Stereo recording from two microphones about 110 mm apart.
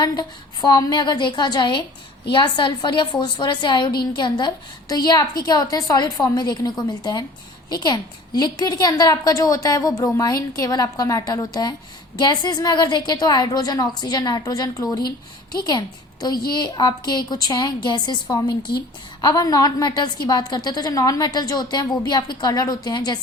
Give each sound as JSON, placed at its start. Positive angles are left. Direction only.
{"t": 0.0, "sound": "a woman's voice", "side_deg": 40}
{"t": 16.2, "sound": "a woman's voice", "side_deg": 40}